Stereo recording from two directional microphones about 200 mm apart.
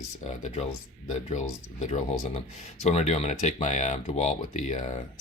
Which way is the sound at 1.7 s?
35° left (ahead or behind).